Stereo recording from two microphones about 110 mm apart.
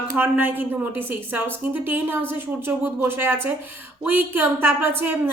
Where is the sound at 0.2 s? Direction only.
15° right (ahead or behind).